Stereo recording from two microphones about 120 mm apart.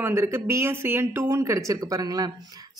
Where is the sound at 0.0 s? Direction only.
20° right (ahead or behind).